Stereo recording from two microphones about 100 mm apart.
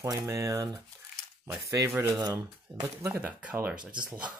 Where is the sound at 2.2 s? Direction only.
45° right (ahead or behind).